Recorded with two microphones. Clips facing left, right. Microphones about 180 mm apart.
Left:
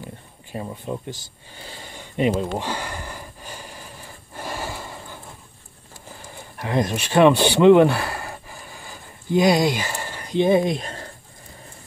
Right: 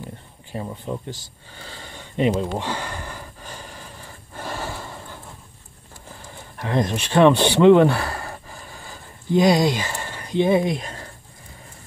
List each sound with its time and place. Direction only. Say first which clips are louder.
0.9 s speech: even; 20° left (ahead or behind)
1.6 s a sound: even; 15° left (ahead or behind)
6.6 s speech: even; 10° left (ahead or behind)
9.4 s speech: right 1 dB; 25° right (ahead or behind)
9.8 s a sound: even; 10° left (ahead or behind)
10.4 s speech: left 1 dB; 20° left (ahead or behind)